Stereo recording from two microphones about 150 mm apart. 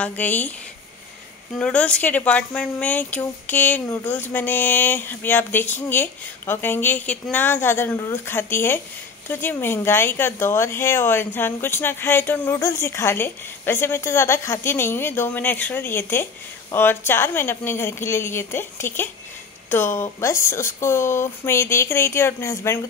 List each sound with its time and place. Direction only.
0.0 s speech: 10° left (ahead or behind)
1.6 s speech: 10° left (ahead or behind)